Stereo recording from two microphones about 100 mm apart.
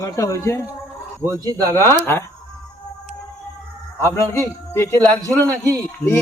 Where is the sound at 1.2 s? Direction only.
35° right (ahead or behind).